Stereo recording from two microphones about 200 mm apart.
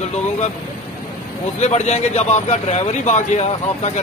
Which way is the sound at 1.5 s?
35° left (ahead or behind).